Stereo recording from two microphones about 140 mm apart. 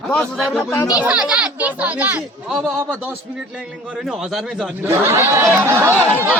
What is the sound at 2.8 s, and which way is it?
A man's voice, 15° right (ahead or behind).